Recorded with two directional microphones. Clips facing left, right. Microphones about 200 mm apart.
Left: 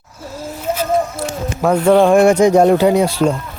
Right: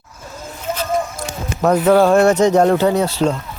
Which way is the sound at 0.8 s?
5° left (ahead or behind).